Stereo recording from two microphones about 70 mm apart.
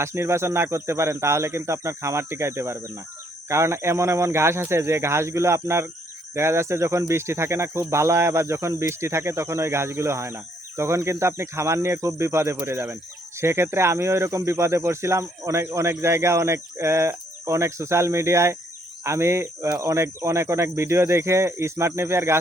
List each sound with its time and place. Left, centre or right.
0.0 s speech: right